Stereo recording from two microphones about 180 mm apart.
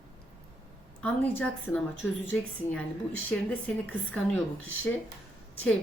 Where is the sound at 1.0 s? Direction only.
10° left (ahead or behind).